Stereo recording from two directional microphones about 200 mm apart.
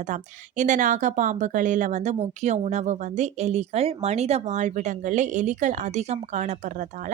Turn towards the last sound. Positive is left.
turn(degrees=-35)  # may be behind; listen again after turning